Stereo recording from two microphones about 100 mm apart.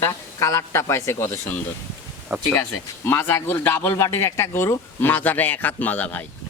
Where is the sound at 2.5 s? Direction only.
20° left (ahead or behind).